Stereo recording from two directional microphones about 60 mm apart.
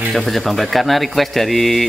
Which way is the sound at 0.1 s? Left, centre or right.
Centre.